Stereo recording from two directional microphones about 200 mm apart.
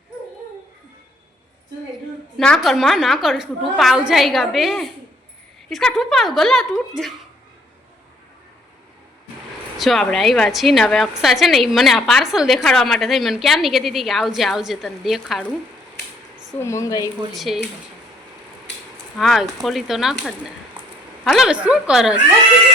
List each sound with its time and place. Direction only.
2.4 s a woman's voice: centre (ahead or behind)
9.7 s a woman's voice: centre (ahead or behind)
16.6 s a woman's voice: 15° left (ahead or behind)
17.3 s a woman's voice: centre (ahead or behind)
18.9 s a sound: 5° left (ahead or behind)
19.6 s a woman's voice: centre (ahead or behind)